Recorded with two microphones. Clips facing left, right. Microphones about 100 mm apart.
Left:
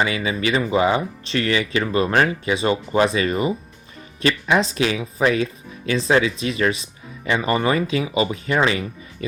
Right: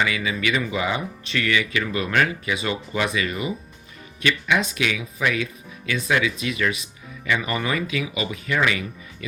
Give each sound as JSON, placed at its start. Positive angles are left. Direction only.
{"t": 0.0, "sound": "speech", "side_deg": 30}